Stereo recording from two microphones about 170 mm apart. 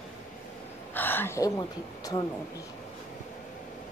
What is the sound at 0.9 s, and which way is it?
A woman's voice, 10° left (ahead or behind).